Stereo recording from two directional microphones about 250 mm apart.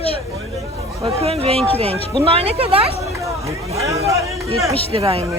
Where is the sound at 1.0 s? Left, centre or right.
Right.